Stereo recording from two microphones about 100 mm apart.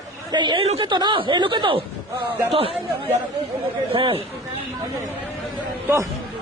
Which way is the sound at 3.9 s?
60° right (ahead or behind).